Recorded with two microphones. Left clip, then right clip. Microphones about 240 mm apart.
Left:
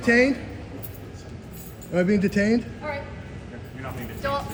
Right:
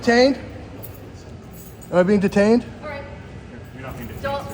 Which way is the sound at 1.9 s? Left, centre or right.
Right.